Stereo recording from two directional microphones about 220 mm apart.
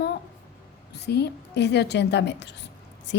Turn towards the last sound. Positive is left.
turn(degrees=50)  # may be behind; listen again after turning